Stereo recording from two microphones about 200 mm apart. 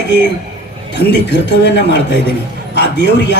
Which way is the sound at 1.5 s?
60° left (ahead or behind).